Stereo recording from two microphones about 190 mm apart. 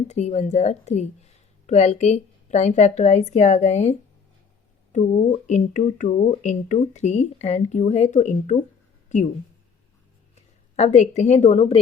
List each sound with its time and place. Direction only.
0.1 s speech: 35° left (ahead or behind)
10.3 s speech: 35° left (ahead or behind)